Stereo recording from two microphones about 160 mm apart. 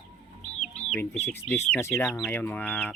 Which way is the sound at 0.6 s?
45° left (ahead or behind).